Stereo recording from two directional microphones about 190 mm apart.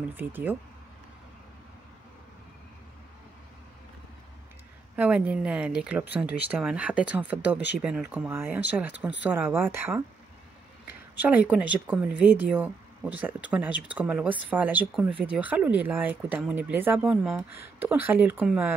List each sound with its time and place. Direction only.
0.1 s speech: 10° right (ahead or behind)
4.9 s speech: 10° right (ahead or behind)
6.0 s speech: 60° left (ahead or behind)
6.5 s speech: 5° right (ahead or behind)
11.1 s speech: 10° right (ahead or behind)